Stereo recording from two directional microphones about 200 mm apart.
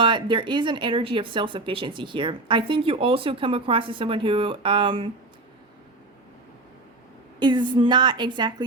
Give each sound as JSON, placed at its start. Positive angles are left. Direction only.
{"t": 0.0, "sound": "speech", "side_deg": -25}
{"t": 7.3, "sound": "speech", "side_deg": -20}